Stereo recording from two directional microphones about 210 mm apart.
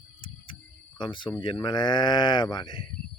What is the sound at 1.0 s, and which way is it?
Speech, 25° left (ahead or behind).